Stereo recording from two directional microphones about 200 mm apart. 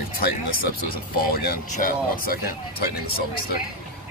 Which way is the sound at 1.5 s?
45° left (ahead or behind).